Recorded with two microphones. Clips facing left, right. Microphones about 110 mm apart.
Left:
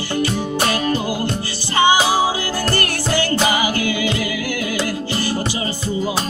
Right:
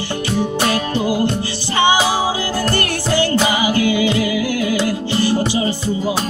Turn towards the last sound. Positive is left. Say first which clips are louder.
# right 4 dB
turn(degrees=-15)  # may be behind; listen again after turning